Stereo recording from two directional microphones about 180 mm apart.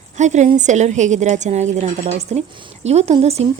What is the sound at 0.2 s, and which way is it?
A woman's voice, 40° right (ahead or behind).